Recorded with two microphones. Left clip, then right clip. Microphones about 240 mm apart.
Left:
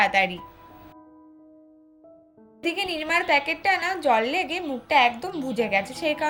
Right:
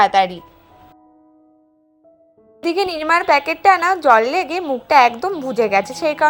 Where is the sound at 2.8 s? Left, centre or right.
Right.